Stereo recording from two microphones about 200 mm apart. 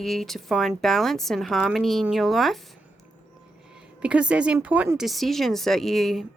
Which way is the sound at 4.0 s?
5° right (ahead or behind).